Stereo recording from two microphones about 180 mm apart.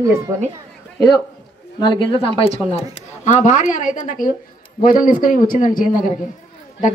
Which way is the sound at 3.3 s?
45° left (ahead or behind).